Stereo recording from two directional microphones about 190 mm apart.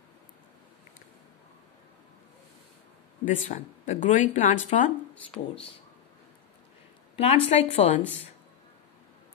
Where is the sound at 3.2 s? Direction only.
40° left (ahead or behind).